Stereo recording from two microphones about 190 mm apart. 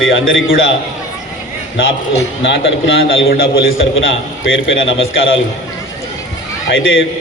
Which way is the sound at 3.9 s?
85° left.